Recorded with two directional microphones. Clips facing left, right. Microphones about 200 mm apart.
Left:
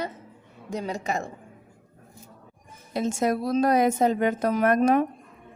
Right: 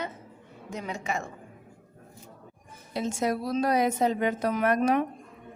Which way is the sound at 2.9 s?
50° left (ahead or behind).